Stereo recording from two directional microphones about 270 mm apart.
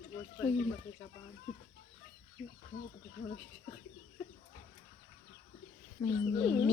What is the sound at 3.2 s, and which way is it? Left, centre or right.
Speech, left.